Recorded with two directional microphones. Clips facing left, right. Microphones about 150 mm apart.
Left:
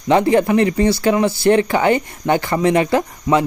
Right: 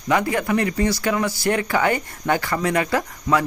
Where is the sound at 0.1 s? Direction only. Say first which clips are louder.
Left 7 dB; 30° left (ahead or behind).